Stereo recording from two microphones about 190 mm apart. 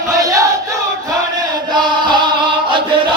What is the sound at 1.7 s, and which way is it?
Music, 25° right (ahead or behind).